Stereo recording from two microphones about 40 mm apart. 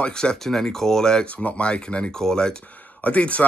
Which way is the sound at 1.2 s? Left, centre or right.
Left.